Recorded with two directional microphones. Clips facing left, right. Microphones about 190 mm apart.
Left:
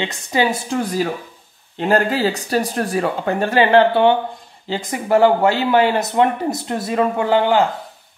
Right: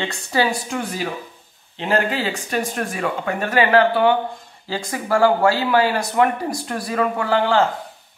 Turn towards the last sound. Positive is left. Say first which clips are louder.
# left 3 dB
turn(degrees=20)  # may be behind; listen again after turning